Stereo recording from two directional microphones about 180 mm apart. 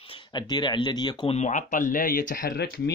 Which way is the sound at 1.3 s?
40° left (ahead or behind).